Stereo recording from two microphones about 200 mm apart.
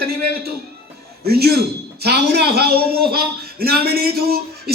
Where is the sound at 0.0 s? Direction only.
50° right (ahead or behind).